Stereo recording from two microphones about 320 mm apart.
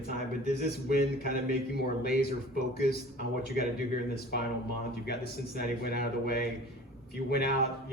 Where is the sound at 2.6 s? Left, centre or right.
Left.